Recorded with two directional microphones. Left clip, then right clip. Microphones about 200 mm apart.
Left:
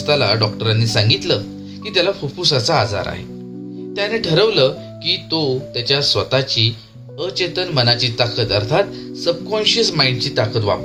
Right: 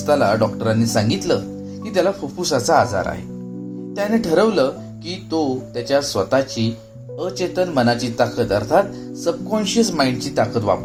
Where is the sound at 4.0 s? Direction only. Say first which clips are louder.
Left 1 dB; 55° right (ahead or behind).